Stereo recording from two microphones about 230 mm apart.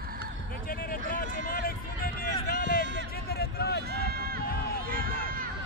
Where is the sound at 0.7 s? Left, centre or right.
Left.